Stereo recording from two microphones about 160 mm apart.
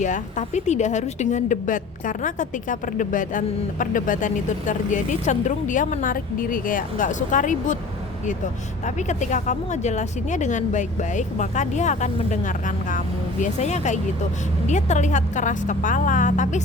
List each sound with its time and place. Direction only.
0.0 s a woman's voice: 50° left (ahead or behind)
8.8 s a woman's voice: 50° left (ahead or behind)